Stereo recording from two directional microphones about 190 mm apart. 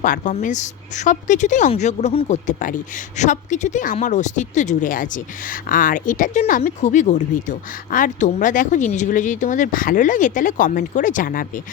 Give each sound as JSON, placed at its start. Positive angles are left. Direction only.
{"t": 0.0, "sound": "a woman's voice", "side_deg": 45}